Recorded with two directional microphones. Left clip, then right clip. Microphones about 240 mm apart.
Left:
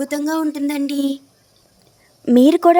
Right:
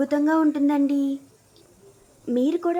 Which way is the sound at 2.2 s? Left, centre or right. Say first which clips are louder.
Left 11 dB; left.